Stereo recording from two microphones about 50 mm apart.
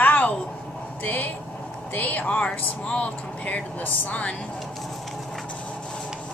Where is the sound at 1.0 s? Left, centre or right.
Left.